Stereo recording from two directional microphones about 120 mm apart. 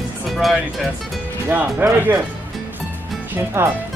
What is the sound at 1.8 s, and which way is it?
Speech, 20° right (ahead or behind).